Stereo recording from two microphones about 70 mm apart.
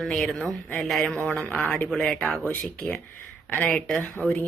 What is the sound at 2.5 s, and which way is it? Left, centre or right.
Speech, centre.